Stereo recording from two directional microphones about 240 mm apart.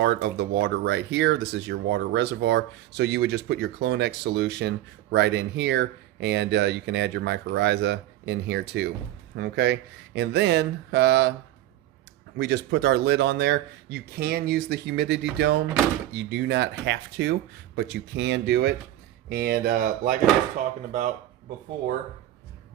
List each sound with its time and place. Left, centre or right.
0.0 s speech: right
12.4 s speech: right